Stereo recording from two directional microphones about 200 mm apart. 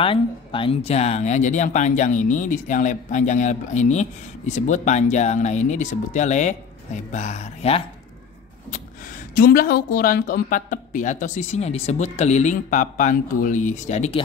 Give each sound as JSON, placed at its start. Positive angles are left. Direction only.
{"t": 0.0, "sound": "speech", "side_deg": 25}
{"t": 9.3, "sound": "speech", "side_deg": 45}